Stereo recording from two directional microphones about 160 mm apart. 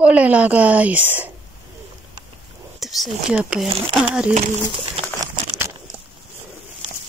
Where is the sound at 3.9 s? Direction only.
10° right (ahead or behind).